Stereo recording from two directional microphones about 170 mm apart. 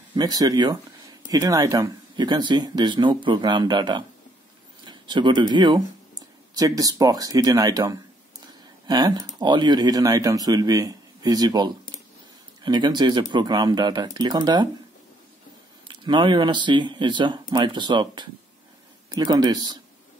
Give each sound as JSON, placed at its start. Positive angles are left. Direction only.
{"t": 0.1, "sound": "speech", "side_deg": -25}
{"t": 15.9, "sound": "speech", "side_deg": -25}